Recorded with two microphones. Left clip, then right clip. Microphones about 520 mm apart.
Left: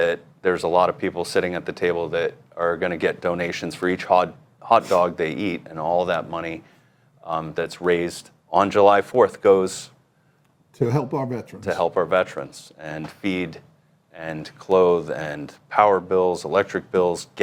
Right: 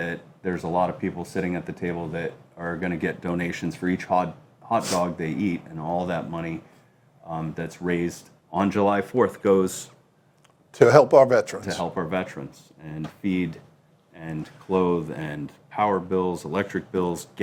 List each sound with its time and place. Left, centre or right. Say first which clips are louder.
0.0 s speech: left 9 dB; left
10.8 s speech: right 11 dB; right
11.6 s speech: left 7 dB; left